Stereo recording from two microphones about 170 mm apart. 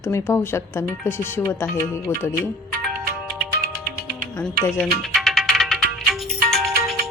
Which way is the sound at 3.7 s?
15° left (ahead or behind).